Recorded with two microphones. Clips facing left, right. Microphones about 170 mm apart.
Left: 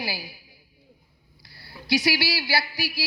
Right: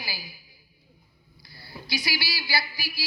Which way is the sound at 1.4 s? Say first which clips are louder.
Left 5 dB; 75° left (ahead or behind).